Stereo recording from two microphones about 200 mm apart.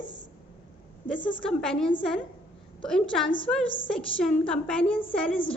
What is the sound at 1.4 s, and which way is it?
Speech, 5° left (ahead or behind).